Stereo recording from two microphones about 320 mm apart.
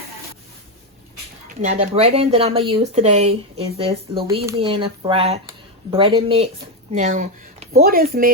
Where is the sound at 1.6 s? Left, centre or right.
Right.